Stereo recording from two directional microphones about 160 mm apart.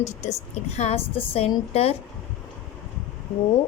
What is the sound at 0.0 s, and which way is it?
A woman's voice, 45° left (ahead or behind).